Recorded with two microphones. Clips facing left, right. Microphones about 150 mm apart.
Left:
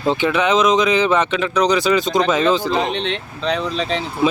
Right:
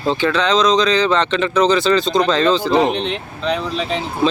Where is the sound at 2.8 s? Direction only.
5° right (ahead or behind).